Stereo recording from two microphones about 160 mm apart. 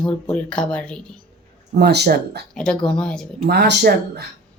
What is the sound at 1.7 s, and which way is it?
Speech, 90° right.